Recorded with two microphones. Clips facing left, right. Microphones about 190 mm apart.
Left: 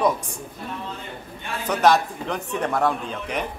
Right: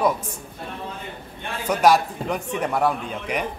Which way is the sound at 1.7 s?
10° right (ahead or behind).